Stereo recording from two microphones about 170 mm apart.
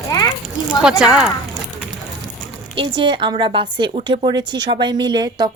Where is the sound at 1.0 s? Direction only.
5° right (ahead or behind).